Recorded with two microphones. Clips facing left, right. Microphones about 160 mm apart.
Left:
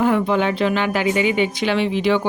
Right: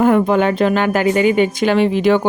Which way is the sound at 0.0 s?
50° right (ahead or behind).